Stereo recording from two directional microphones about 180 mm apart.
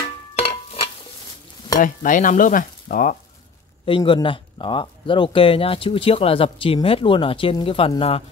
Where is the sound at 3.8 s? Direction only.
30° left (ahead or behind).